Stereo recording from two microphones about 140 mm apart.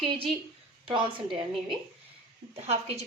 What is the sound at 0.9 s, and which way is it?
Speech, 35° right (ahead or behind).